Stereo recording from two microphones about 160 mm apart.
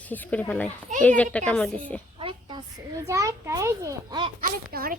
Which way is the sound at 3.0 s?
20° right (ahead or behind).